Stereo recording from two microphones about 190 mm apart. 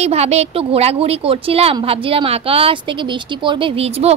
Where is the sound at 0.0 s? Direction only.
35° right (ahead or behind).